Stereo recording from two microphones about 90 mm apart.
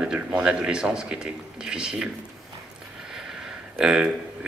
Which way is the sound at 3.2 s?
5° right (ahead or behind).